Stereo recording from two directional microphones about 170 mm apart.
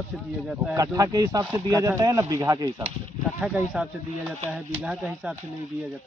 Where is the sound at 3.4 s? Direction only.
5° right (ahead or behind).